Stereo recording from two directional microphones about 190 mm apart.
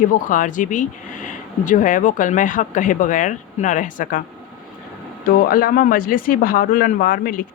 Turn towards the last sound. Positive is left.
turn(degrees=50)  # may be behind; listen again after turning